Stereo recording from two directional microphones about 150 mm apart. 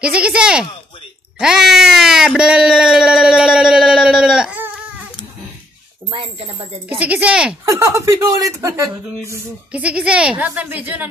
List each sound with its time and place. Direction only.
0.0 s speech: 5° right (ahead or behind)
6.0 s speech: 40° right (ahead or behind)
7.0 s speech: 10° right (ahead or behind)
7.6 s speech: 20° right (ahead or behind)
9.7 s speech: 10° right (ahead or behind)